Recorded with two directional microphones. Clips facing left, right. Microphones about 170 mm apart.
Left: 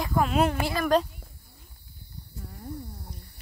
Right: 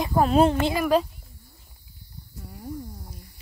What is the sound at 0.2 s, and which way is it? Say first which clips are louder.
Speech: right 5 dB; 30° right (ahead or behind).